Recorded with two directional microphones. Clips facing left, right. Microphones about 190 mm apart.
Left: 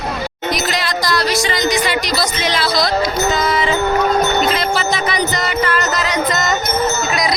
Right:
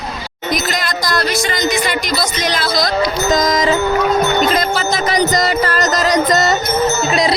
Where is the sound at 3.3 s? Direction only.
40° right (ahead or behind).